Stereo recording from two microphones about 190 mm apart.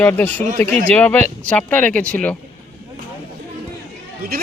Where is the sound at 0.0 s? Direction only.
10° left (ahead or behind).